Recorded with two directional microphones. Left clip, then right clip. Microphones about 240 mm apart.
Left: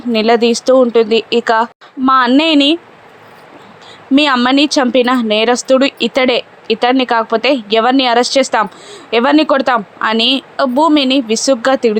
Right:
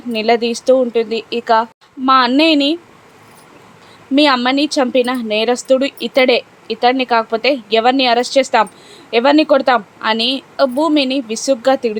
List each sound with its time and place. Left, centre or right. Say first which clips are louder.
0.1 s a woman's voice: left 4 dB; centre
4.1 s a woman's voice: left 2 dB; centre